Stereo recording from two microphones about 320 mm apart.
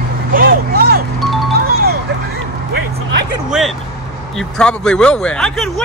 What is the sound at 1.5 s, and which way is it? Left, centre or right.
Music, right.